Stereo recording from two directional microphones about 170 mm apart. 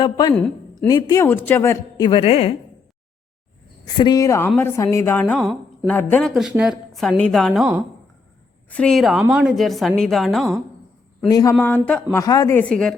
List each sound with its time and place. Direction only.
0.0 s a woman's voice: 25° left (ahead or behind)
0.3 s a sound: 10° left (ahead or behind)
0.9 s a woman's voice: 20° left (ahead or behind)
2.0 s a woman's voice: 30° left (ahead or behind)
3.9 s a woman's voice: 25° left (ahead or behind)
6.6 s a woman's voice: centre (ahead or behind)
11.3 s a woman's voice: 20° left (ahead or behind)
11.6 s a woman's voice: 10° left (ahead or behind)
12.1 s a woman's voice: 20° left (ahead or behind)
12.5 s a woman's voice: 5° left (ahead or behind)